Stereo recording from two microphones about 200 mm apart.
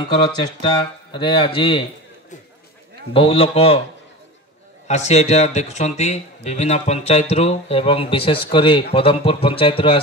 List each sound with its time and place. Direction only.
0.1 s speech: 20° left (ahead or behind)
3.1 s speech: 30° left (ahead or behind)
4.8 s speech: 35° left (ahead or behind)